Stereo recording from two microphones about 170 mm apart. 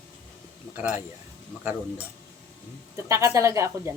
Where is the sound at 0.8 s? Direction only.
10° right (ahead or behind).